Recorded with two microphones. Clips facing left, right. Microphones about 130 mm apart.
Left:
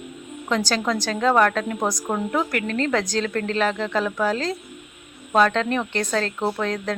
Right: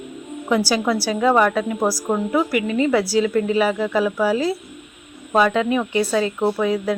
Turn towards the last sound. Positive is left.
turn(degrees=-10)  # may be behind; listen again after turning